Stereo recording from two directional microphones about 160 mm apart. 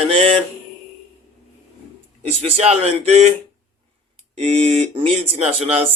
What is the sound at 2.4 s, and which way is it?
Speech, 40° right (ahead or behind).